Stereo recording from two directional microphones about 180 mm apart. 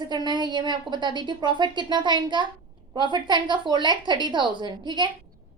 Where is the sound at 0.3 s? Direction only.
25° right (ahead or behind).